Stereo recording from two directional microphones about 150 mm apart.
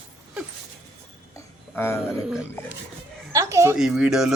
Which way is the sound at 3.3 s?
20° right (ahead or behind).